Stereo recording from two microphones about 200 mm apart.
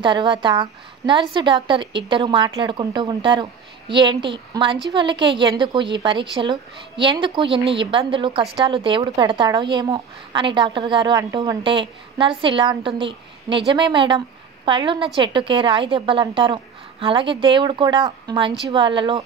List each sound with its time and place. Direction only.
0.0 s a woman's voice: 25° right (ahead or behind)